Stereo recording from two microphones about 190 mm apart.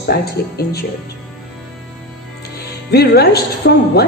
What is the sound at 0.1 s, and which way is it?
Speech, 55° left (ahead or behind).